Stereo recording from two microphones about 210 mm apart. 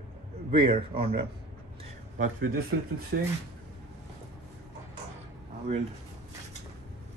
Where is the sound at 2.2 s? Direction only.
45° right (ahead or behind).